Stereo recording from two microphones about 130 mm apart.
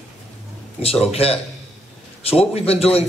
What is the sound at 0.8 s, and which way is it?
A man's voice, 50° left (ahead or behind).